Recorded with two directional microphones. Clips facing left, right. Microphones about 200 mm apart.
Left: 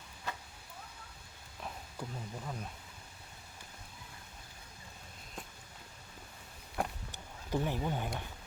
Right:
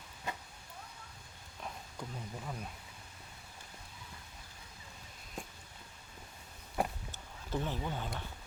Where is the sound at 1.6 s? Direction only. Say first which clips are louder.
Left 1 dB; centre (ahead or behind).